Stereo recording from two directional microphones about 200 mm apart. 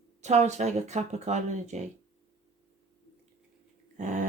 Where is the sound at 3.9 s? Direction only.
40° right (ahead or behind).